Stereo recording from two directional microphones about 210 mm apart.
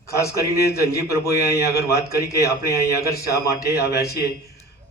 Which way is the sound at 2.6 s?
15° left (ahead or behind).